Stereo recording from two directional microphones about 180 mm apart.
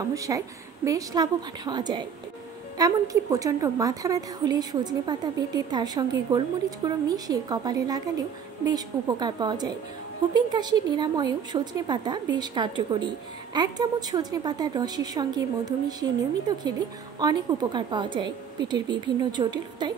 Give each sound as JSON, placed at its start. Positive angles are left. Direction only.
{"t": 0.1, "sound": "a woman's voice", "side_deg": -20}